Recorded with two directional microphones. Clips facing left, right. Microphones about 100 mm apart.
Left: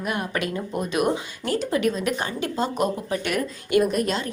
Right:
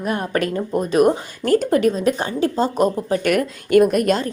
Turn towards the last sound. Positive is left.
turn(degrees=-55)  # may be behind; listen again after turning